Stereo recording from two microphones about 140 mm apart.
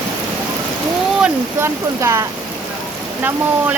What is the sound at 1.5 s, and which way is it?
Speech, 20° right (ahead or behind).